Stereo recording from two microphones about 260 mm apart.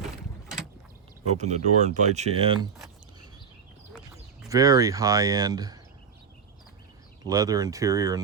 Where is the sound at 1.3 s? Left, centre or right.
Right.